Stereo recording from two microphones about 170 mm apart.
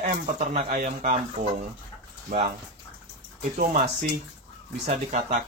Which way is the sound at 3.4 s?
50° right (ahead or behind).